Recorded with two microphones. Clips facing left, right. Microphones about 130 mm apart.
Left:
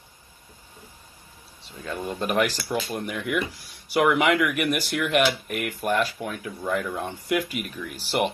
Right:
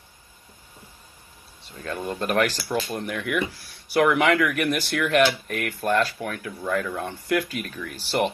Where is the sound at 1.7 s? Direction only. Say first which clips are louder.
Right 1 dB; 5° left (ahead or behind).